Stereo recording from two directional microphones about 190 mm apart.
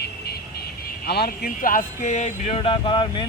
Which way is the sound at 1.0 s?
55° left (ahead or behind).